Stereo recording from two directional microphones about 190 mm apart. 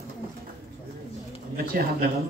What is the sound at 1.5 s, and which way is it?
Speech, 50° right (ahead or behind).